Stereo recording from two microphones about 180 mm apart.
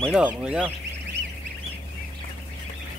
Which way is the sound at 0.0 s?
5° right (ahead or behind).